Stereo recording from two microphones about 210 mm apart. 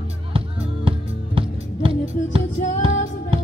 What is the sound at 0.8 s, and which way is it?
Music, 25° right (ahead or behind).